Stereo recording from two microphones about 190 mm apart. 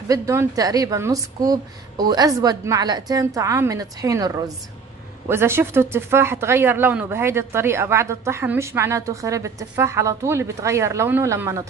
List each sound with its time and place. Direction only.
0.1 s speech: 15° right (ahead or behind)